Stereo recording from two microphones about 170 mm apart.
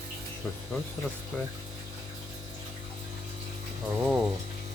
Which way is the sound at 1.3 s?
5° left (ahead or behind).